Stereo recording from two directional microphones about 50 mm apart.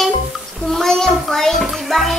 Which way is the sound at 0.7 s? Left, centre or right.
Centre.